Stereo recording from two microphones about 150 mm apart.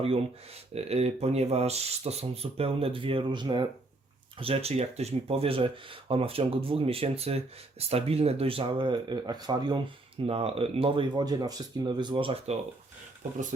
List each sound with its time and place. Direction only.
0.7 s speech: 45° right (ahead or behind); by 9.8 s 30° right (ahead or behind)
10.2 s speech: 40° right (ahead or behind)